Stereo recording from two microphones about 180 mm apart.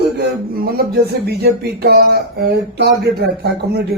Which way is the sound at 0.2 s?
60° right (ahead or behind).